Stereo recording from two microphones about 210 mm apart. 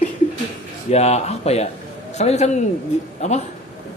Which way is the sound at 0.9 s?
30° left (ahead or behind).